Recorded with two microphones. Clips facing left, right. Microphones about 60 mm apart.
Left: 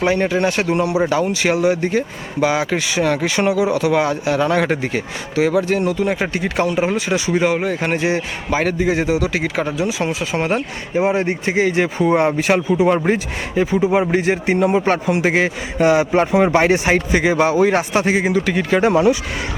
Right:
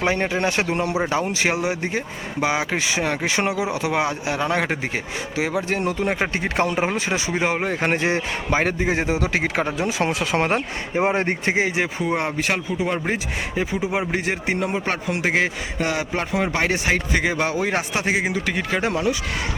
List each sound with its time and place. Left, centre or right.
0.0 s speech: right
9.7 s speech: right
10.5 s speech: right
11.5 s speech: centre
11.8 s speech: centre
15.8 s speech: left
17.1 s speech: centre
18.9 s speech: centre